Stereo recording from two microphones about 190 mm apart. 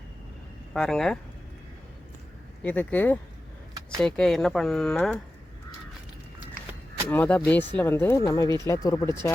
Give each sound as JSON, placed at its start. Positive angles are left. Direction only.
{"t": 0.7, "sound": "speech", "side_deg": 5}
{"t": 2.6, "sound": "speech", "side_deg": 10}
{"t": 7.1, "sound": "speech", "side_deg": 10}